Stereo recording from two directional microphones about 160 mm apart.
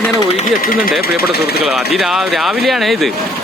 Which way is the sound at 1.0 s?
75° left (ahead or behind).